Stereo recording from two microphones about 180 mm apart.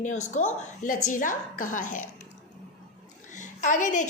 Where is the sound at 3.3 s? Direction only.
45° left (ahead or behind).